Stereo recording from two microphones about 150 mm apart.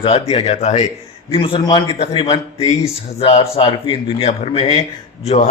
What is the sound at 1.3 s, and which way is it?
A man's voice, 35° left (ahead or behind).